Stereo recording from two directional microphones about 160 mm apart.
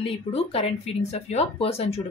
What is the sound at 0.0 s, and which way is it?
A woman's voice, 40° left (ahead or behind).